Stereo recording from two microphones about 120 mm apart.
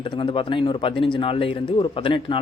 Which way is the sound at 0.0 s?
45° left (ahead or behind).